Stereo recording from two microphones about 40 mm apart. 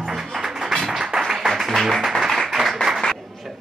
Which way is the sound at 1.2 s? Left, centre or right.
Centre.